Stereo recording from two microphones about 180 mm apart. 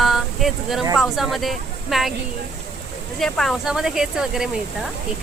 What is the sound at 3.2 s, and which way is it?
Speech, centre (ahead or behind).